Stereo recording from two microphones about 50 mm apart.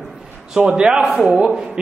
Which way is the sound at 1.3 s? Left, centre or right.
Right.